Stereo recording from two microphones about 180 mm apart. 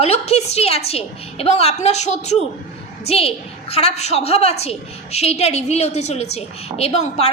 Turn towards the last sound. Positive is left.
turn(degrees=35)  # may be behind; listen again after turning